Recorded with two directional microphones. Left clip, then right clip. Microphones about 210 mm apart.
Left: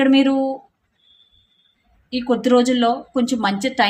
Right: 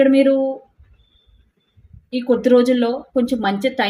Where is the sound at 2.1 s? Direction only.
20° left (ahead or behind).